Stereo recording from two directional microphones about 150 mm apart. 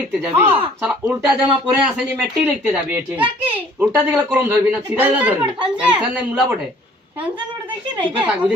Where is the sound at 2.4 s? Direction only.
10° right (ahead or behind).